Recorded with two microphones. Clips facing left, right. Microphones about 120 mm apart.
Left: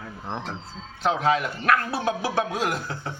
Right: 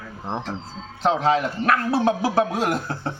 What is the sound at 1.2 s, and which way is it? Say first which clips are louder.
Speech: right 2 dB; 35° right (ahead or behind).